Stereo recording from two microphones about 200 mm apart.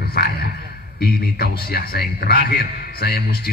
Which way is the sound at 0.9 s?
50° left (ahead or behind).